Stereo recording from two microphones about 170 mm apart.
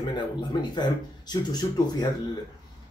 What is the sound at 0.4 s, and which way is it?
Speech, 25° left (ahead or behind).